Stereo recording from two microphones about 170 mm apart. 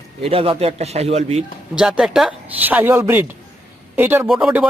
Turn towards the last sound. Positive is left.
turn(degrees=-5)  # may be behind; listen again after turning